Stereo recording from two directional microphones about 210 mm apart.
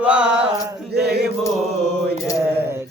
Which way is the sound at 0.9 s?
50° right (ahead or behind).